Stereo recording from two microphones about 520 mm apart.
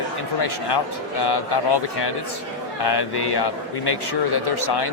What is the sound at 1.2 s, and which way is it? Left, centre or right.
Speech, left.